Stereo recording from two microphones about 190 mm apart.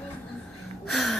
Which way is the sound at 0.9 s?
Centre (ahead or behind).